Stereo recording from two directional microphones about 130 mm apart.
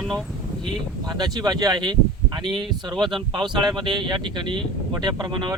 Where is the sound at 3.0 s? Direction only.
35° right (ahead or behind).